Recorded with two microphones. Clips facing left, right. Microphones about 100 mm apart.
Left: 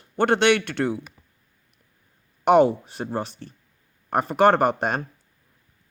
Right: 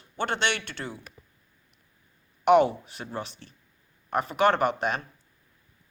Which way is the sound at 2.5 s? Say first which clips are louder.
Left 3 dB; 35° left (ahead or behind).